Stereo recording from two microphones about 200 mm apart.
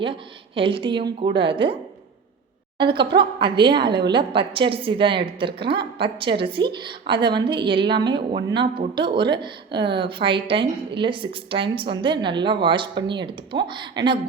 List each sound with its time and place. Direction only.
0.0 s speech: 25° right (ahead or behind)